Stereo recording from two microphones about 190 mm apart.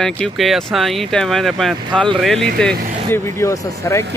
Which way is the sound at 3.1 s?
15° left (ahead or behind).